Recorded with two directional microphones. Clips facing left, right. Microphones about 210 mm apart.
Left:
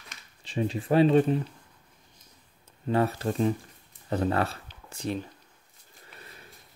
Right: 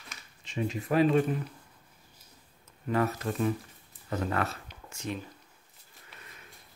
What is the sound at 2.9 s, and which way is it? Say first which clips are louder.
Speech: left 3 dB; 30° left (ahead or behind).